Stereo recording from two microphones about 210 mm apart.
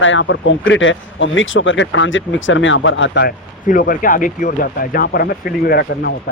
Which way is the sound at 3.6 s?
40° left (ahead or behind).